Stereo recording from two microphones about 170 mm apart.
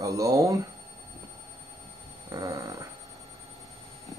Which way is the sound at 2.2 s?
20° right (ahead or behind).